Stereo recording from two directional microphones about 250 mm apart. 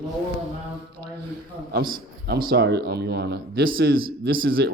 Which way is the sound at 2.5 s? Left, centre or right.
Right.